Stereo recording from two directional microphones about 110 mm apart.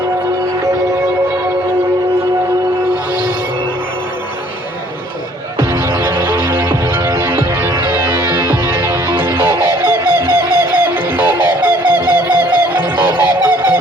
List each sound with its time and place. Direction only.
5.7 s music: 20° right (ahead or behind)
8.8 s music: 20° right (ahead or behind)